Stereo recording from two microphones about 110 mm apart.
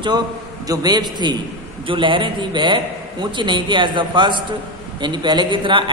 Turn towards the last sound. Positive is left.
turn(degrees=-50)  # may be behind; listen again after turning